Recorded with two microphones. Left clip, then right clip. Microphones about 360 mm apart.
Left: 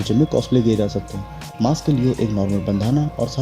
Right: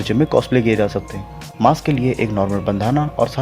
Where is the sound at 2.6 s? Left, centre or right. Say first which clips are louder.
Right 4 dB; right.